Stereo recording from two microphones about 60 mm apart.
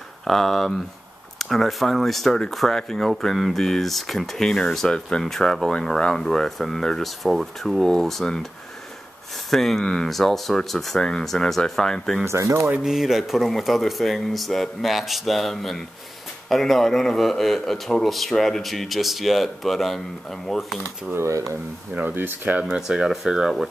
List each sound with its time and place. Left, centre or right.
0.2 s a man's voice: centre
9.5 s a man's voice: centre
12.3 s speech: right
12.8 s a man's voice: centre
21.3 s speech: right
22.0 s speech: right
22.8 s speech: centre